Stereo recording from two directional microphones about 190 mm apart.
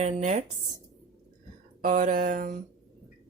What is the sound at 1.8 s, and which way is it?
Speech, 45° right (ahead or behind).